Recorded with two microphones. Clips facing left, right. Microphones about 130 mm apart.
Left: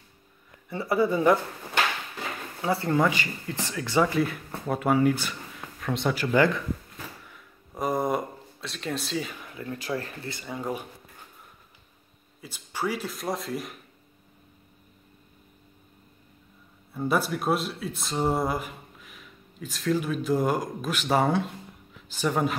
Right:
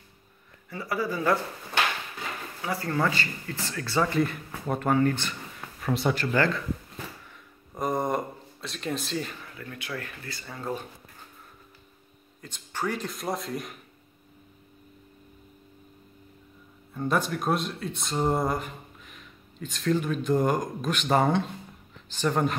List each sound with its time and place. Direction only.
0.7 s speech: 25° left (ahead or behind)
2.6 s speech: 25° left (ahead or behind)
4.0 s speech: 5° left (ahead or behind)
6.3 s speech: 15° left (ahead or behind)
7.7 s a sound: 5° left (ahead or behind)
9.4 s a sound: 20° left (ahead or behind)
9.8 s speech: 35° left (ahead or behind)
10.4 s speech: 15° left (ahead or behind)
12.4 s speech: 10° left (ahead or behind)
16.9 s speech: 5° left (ahead or behind)